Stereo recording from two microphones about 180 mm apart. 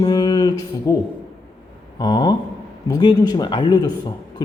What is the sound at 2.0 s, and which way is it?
Speech, 20° left (ahead or behind).